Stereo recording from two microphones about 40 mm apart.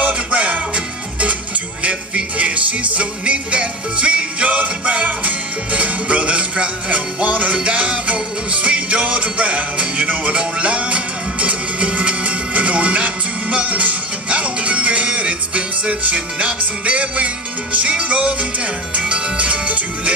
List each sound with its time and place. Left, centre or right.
0.0 s music: right